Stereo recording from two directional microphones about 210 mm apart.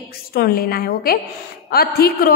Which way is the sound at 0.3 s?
45° left (ahead or behind).